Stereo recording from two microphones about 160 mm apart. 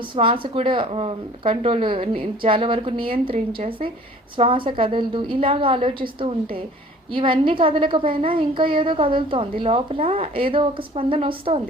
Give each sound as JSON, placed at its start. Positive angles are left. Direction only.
{"t": 0.0, "sound": "speech", "side_deg": -30}